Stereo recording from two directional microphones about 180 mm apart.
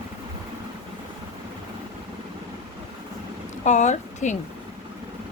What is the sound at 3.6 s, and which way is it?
Speech, 40° left (ahead or behind).